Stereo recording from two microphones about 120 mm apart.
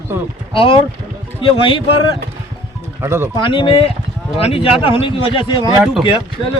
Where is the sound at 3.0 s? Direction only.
20° right (ahead or behind).